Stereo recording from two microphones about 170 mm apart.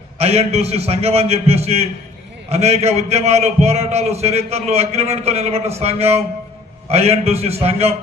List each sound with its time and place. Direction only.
0.2 s a man's voice: 40° right (ahead or behind)